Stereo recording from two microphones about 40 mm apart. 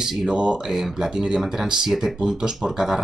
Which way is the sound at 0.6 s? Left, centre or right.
Centre.